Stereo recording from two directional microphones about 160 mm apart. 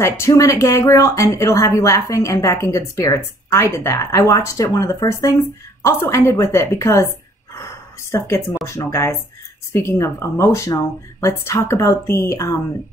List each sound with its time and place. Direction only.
0.0 s a woman's voice: 20° left (ahead or behind)
8.6 s a woman's voice: 20° left (ahead or behind)